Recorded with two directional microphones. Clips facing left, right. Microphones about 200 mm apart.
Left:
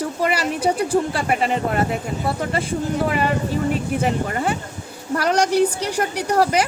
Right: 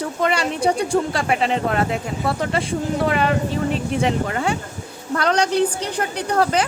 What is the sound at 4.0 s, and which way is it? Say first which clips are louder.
A woman's voice: right 1 dB; 5° left (ahead or behind).